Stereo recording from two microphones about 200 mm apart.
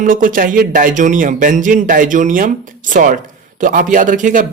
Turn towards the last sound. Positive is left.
turn(degrees=-40)  # may be behind; listen again after turning